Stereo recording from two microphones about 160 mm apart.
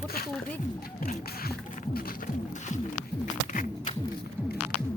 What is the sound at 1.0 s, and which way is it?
Beatboxing, 65° left (ahead or behind).